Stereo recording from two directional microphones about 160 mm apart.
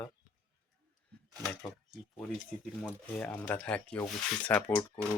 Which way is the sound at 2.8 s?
10° left (ahead or behind).